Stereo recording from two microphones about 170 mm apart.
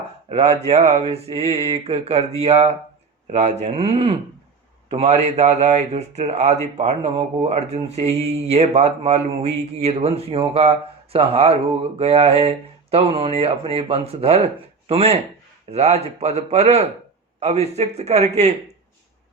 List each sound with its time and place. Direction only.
0.3 s speech: 40° right (ahead or behind)